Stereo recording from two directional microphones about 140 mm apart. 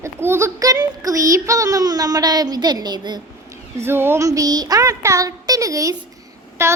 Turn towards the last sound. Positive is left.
turn(degrees=-20)  # may be behind; listen again after turning